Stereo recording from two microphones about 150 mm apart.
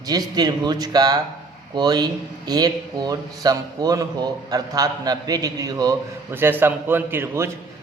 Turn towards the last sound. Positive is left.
turn(degrees=-15)  # may be behind; listen again after turning